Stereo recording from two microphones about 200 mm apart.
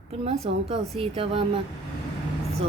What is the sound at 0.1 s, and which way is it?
A woman's voice, 30° right (ahead or behind).